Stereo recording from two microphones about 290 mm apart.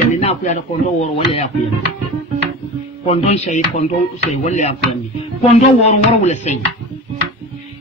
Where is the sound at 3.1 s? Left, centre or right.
Left.